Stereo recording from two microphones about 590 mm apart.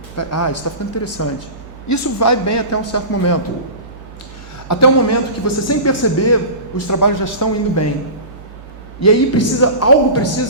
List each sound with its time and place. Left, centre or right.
0.2 s a man's voice: left
4.7 s a man's voice: left
9.0 s a man's voice: left